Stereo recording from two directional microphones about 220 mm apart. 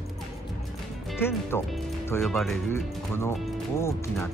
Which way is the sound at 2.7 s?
10° left (ahead or behind).